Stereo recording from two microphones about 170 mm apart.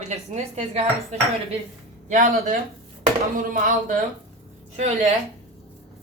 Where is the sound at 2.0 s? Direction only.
55° right (ahead or behind).